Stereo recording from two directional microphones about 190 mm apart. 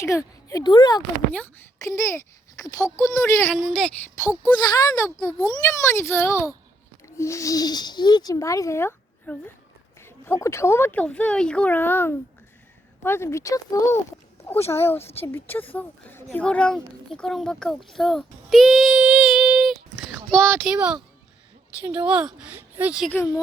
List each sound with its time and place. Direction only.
0.4 s speech: 20° left (ahead or behind)
1.3 s speech: 10° left (ahead or behind)
23.1 s speech: 20° left (ahead or behind)